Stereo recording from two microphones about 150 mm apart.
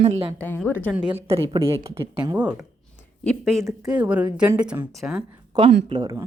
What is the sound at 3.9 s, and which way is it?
A woman's voice, 10° right (ahead or behind).